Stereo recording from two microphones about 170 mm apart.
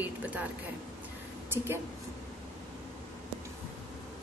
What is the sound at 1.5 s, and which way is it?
Speech, 15° right (ahead or behind).